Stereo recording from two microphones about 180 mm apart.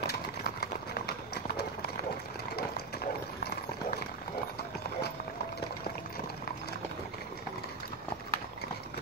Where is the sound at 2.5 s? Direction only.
60° left (ahead or behind).